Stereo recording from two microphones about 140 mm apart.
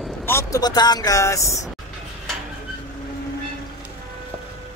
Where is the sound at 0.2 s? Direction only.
20° left (ahead or behind).